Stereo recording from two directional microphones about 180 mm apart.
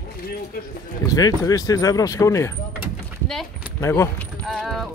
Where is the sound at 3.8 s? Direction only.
15° left (ahead or behind).